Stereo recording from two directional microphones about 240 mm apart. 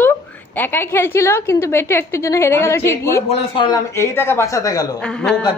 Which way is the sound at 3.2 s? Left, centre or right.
Left.